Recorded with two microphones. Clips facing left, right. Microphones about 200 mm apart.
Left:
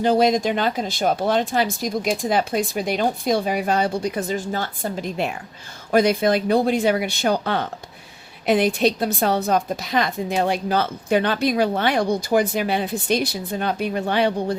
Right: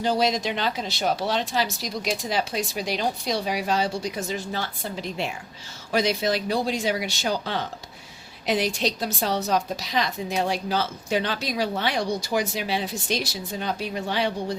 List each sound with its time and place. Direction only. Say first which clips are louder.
0.0 s a woman's voice: left 6 dB; 55° left (ahead or behind)